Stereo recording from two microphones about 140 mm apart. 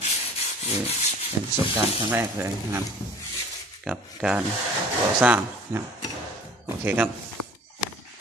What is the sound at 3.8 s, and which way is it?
Speech, 5° right (ahead or behind).